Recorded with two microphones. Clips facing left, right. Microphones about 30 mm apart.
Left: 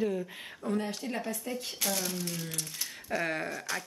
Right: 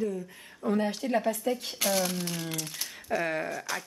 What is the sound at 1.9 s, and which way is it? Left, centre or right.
Speech, right.